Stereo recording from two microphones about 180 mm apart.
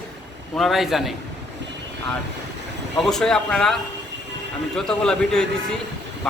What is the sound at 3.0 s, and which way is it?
Speech, centre (ahead or behind).